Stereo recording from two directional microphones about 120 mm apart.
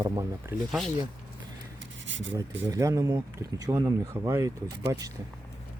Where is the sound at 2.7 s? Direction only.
30° right (ahead or behind).